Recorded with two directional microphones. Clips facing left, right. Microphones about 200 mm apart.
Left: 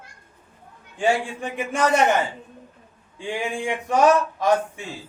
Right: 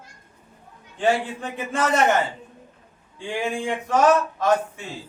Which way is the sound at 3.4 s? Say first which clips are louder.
Right 2 dB; 15° left (ahead or behind).